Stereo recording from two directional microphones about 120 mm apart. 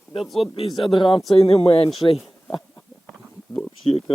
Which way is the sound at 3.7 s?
50° left (ahead or behind).